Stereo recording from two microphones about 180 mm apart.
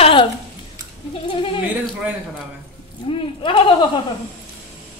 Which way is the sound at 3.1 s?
30° left (ahead or behind).